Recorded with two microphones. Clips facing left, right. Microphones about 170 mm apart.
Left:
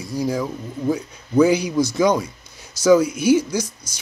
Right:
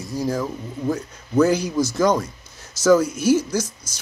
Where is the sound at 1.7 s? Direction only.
5° right (ahead or behind).